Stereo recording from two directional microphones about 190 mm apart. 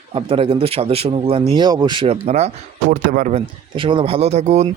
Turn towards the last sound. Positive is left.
turn(degrees=-35)  # may be behind; listen again after turning